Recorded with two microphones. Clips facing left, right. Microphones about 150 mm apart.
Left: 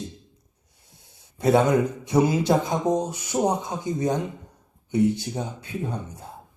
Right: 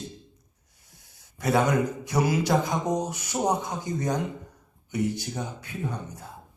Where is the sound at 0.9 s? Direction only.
25° left (ahead or behind).